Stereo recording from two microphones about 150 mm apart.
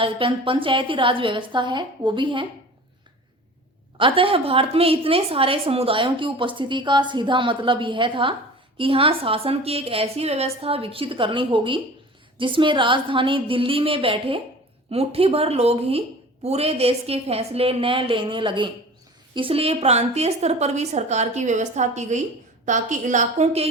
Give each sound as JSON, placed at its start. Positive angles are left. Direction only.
{"t": 0.0, "sound": "a woman's voice", "side_deg": -35}
{"t": 3.9, "sound": "a woman's voice", "side_deg": -35}